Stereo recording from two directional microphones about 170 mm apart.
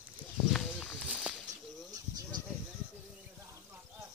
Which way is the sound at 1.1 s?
5° right (ahead or behind).